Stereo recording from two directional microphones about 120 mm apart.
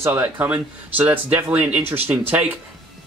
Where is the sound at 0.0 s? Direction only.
15° right (ahead or behind).